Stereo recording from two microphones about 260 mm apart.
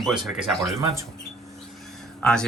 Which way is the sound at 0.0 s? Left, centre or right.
Centre.